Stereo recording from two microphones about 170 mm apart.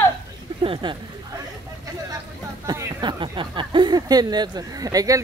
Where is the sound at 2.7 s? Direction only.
25° right (ahead or behind).